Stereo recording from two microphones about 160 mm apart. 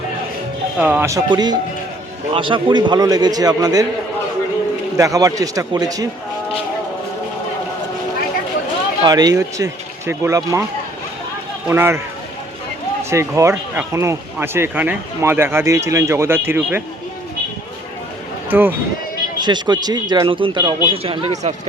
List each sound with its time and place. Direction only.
0.8 s a man's voice: 10° right (ahead or behind)
4.9 s a man's voice: 20° right (ahead or behind)
9.0 s a man's voice: 25° right (ahead or behind)
11.7 s speech: 15° right (ahead or behind)
13.1 s speech: 20° right (ahead or behind)
18.5 s speech: 10° right (ahead or behind)
19.4 s a man's voice: 25° right (ahead or behind)